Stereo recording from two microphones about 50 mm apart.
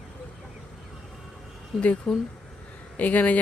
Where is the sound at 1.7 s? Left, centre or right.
Centre.